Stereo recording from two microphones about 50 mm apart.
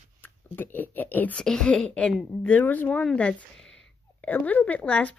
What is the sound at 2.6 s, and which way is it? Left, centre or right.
Speech, left.